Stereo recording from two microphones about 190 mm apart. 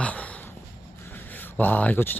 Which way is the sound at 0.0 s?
5° left (ahead or behind).